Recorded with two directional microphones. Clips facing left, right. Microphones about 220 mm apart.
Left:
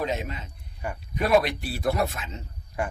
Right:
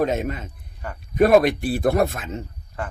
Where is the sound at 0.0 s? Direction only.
50° right (ahead or behind).